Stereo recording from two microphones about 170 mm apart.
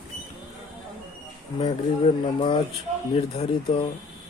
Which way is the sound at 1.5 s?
30° left (ahead or behind).